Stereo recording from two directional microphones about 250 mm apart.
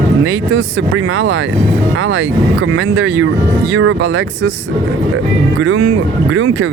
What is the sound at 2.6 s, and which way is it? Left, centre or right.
Speech, right.